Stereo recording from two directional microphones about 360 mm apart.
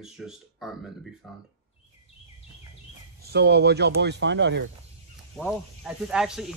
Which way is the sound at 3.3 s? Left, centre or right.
Right.